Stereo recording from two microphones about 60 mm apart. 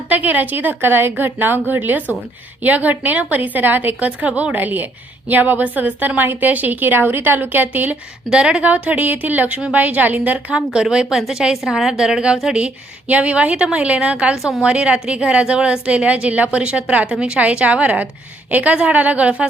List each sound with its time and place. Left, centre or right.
0.1 s a woman's voice: right
8.3 s speech: centre
10.5 s a woman's voice: centre